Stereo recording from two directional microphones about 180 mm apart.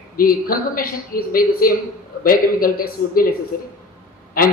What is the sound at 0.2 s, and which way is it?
A man's voice, 55° left (ahead or behind).